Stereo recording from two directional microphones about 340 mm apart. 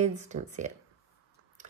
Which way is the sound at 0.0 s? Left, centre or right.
Centre.